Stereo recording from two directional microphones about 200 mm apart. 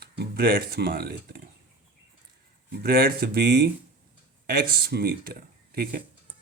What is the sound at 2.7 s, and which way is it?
Speech, 50° right (ahead or behind).